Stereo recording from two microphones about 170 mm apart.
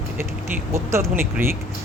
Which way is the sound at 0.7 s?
15° right (ahead or behind).